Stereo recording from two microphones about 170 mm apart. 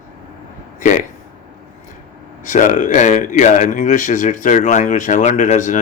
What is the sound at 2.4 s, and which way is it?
Speech, 45° left (ahead or behind).